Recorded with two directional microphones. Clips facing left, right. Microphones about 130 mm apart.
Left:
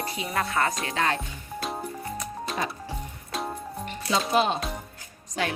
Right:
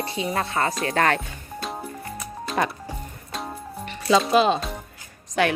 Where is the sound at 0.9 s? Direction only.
60° right (ahead or behind).